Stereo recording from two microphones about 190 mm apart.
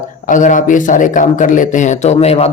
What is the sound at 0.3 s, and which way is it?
Speech, 45° left (ahead or behind).